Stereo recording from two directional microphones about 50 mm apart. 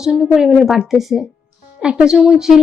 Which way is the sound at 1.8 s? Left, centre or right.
Centre.